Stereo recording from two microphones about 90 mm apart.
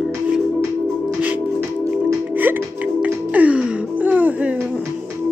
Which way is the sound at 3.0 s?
15° right (ahead or behind).